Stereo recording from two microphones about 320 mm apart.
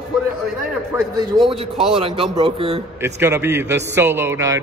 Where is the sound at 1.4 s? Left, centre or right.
Centre.